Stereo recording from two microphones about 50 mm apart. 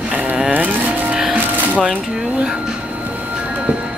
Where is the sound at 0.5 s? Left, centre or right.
Right.